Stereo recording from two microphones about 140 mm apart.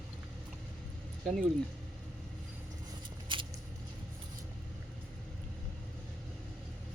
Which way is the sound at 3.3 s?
35° right (ahead or behind).